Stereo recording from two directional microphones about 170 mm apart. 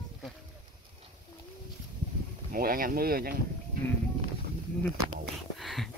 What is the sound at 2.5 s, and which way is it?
Speech, 55° right (ahead or behind).